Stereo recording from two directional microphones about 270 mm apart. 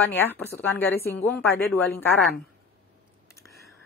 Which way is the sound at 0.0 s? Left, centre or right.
Centre.